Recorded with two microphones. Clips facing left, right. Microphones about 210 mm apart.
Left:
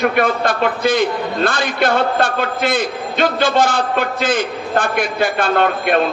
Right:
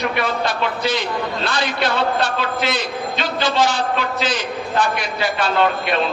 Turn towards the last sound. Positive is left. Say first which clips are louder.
# left 3 dB
turn(degrees=50)  # may be behind; listen again after turning